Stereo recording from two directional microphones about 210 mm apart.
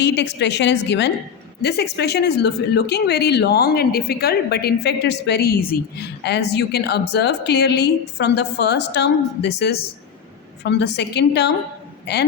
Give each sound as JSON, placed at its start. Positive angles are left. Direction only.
{"t": 0.0, "sound": "a woman's voice", "side_deg": 55}